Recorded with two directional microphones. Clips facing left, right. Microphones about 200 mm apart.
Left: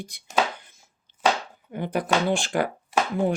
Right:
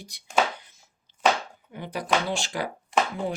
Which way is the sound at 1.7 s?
55° left (ahead or behind).